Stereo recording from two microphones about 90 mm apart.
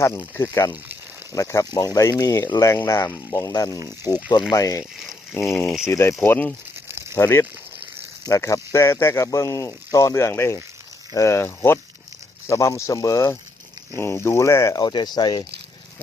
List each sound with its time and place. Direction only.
0.2 s speech: 25° left (ahead or behind); by 3.8 s 40° left (ahead or behind)
4.1 s speech: 20° left (ahead or behind)
4.5 s speech: 35° left (ahead or behind)
4.8 s speech: centre (ahead or behind)
5.3 s speech: 30° left (ahead or behind)
5.5 s speech: centre (ahead or behind)
5.8 s speech: 30° left (ahead or behind)
6.8 s a sound: 30° right (ahead or behind)
7.2 s speech: 30° left (ahead or behind); by 15.4 s 50° left (ahead or behind)